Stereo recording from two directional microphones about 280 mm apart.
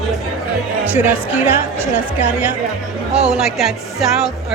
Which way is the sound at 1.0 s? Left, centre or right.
Centre.